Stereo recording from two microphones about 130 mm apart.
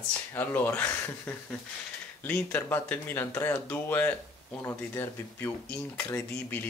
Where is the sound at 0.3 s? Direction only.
15° left (ahead or behind).